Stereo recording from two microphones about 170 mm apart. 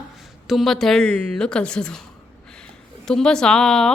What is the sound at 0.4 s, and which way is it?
A woman's voice, centre (ahead or behind).